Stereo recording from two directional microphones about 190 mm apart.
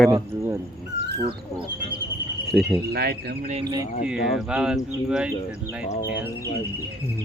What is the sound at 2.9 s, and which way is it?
Speech, 55° right (ahead or behind).